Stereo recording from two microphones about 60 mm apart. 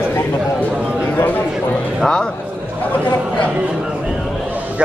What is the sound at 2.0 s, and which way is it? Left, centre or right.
Speech, centre.